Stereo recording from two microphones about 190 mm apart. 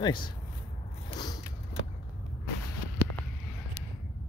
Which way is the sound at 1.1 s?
20° left (ahead or behind).